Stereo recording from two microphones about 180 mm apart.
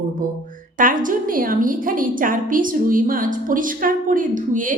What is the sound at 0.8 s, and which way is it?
A woman's voice, 50° right (ahead or behind).